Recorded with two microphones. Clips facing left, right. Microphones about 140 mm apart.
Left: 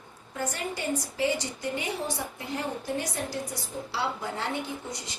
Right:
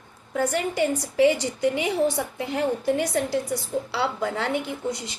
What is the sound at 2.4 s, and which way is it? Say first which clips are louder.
A woman's voice: right 11 dB; 80° right.